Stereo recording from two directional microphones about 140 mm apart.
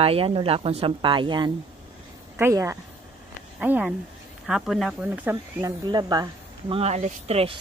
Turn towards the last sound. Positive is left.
turn(degrees=-45)  # may be behind; listen again after turning